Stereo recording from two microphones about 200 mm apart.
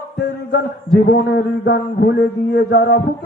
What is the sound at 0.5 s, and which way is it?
A man's voice, 55° left (ahead or behind).